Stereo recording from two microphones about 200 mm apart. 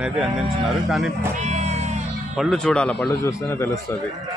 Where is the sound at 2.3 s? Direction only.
5° left (ahead or behind).